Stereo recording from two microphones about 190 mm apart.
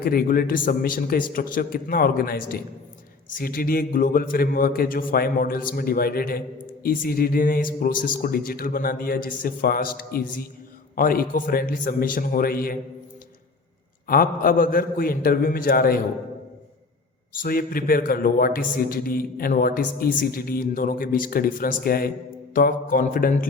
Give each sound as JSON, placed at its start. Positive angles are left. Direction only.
{"t": 0.0, "sound": "a man's voice", "side_deg": 50}
{"t": 14.1, "sound": "a man's voice", "side_deg": 50}
{"t": 17.3, "sound": "a man's voice", "side_deg": 50}